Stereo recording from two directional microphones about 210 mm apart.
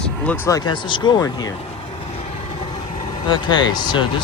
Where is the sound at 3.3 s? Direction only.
20° left (ahead or behind).